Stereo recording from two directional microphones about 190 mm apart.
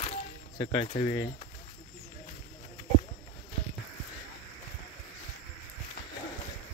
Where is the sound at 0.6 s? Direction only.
30° left (ahead or behind).